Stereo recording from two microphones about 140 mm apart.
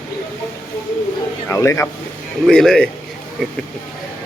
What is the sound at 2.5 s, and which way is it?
Speech, 5° left (ahead or behind).